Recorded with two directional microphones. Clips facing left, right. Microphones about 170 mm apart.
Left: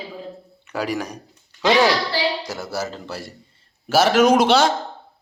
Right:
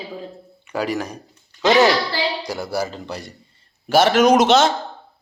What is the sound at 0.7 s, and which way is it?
Speech, 10° left (ahead or behind).